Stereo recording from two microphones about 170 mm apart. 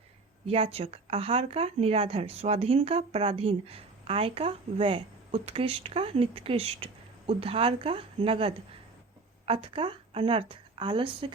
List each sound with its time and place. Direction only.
0.4 s speech: 35° right (ahead or behind)